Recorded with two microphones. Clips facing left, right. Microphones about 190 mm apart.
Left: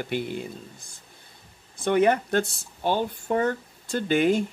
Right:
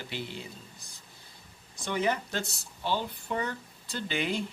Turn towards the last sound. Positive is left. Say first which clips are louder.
# left 10 dB
turn(degrees=50)  # may be behind; listen again after turning